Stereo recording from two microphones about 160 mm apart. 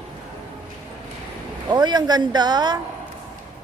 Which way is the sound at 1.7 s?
25° right (ahead or behind).